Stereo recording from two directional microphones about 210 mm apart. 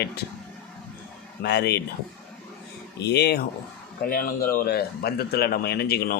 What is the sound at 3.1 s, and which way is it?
Speech, 50° left (ahead or behind).